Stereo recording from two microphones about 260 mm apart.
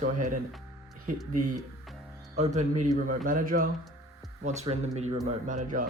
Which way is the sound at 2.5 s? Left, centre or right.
Right.